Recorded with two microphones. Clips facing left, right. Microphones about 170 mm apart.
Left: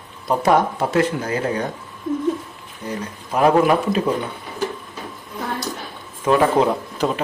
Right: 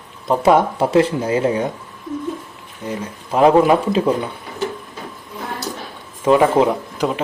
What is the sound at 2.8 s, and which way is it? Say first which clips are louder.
Speech: right 2 dB; 20° right (ahead or behind).